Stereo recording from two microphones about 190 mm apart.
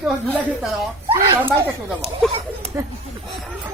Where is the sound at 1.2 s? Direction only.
25° right (ahead or behind).